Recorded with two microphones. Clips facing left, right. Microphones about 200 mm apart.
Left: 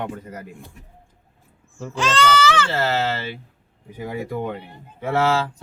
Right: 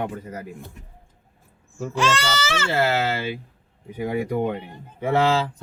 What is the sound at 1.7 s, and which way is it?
Speech, 10° right (ahead or behind).